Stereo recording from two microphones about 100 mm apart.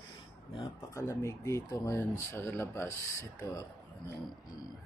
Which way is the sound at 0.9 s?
30° left (ahead or behind).